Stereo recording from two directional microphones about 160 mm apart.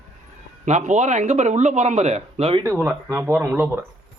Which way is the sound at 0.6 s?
45° right (ahead or behind).